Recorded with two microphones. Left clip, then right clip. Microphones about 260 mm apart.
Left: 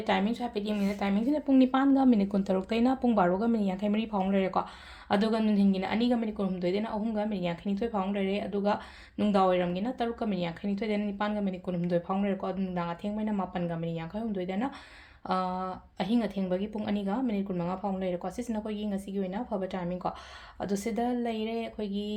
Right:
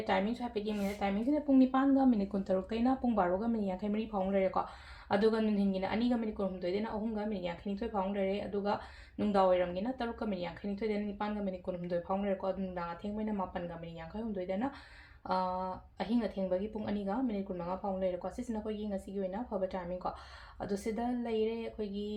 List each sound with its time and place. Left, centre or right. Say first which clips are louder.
0.1 s a woman's voice: left 4 dB; left
14.3 s speech: left 1 dB; left